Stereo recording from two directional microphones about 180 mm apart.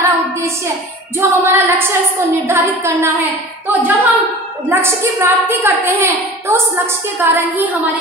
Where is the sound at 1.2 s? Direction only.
15° right (ahead or behind).